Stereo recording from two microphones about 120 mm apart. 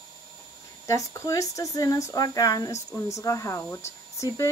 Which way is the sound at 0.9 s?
25° left (ahead or behind).